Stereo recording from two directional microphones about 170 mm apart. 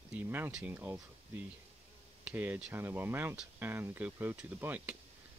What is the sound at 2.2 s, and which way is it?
Speech, 10° right (ahead or behind).